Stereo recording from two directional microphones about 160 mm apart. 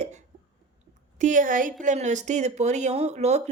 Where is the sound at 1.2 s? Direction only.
55° right (ahead or behind).